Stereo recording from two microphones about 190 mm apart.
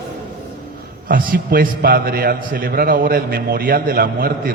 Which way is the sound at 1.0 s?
50° right (ahead or behind).